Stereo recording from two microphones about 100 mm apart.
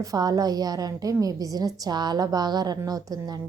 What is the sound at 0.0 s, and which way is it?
A woman's voice, 40° right (ahead or behind).